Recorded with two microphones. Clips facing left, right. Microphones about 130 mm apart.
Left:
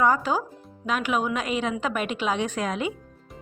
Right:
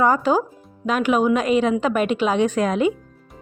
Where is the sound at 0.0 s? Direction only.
40° right (ahead or behind).